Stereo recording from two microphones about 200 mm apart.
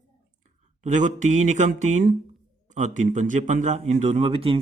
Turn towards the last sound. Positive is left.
turn(degrees=-25)  # may be behind; listen again after turning